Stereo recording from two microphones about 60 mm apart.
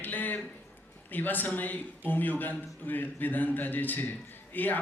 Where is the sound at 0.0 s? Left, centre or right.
Left.